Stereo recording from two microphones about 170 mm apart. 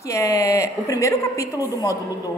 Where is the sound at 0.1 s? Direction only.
20° left (ahead or behind).